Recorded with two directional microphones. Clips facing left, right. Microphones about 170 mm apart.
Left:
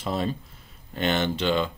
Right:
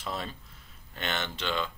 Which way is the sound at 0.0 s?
30° left (ahead or behind).